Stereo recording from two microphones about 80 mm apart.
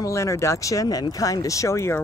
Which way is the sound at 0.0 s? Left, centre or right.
Left.